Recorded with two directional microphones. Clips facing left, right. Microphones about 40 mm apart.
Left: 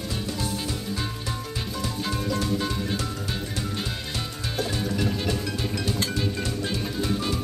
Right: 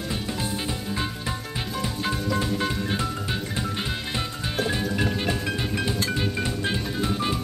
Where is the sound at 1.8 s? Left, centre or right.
Right.